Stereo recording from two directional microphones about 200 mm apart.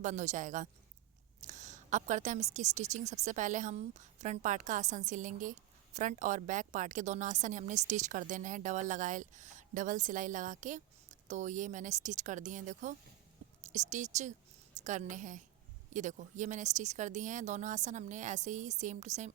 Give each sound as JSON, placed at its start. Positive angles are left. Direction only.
{"t": 0.0, "sound": "a woman's voice", "side_deg": -35}